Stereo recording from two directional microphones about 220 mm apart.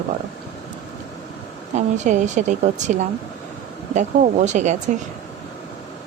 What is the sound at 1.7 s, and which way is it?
A woman's voice, 30° right (ahead or behind).